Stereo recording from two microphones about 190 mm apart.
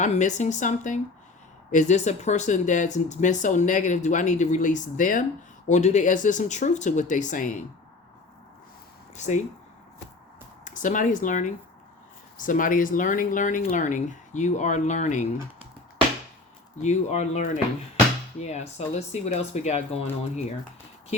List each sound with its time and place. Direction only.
0.0 s speech: 40° left (ahead or behind)
9.1 s speech: 40° left (ahead or behind)
10.6 s speech: 40° left (ahead or behind)
16.8 s speech: 40° left (ahead or behind)